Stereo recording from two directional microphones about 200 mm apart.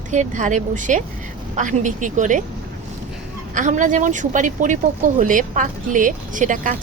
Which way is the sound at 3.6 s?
40° right (ahead or behind).